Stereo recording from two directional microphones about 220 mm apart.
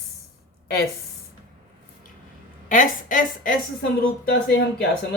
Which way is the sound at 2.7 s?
35° left (ahead or behind).